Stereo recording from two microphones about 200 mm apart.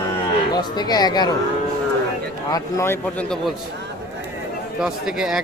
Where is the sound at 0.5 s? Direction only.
20° left (ahead or behind).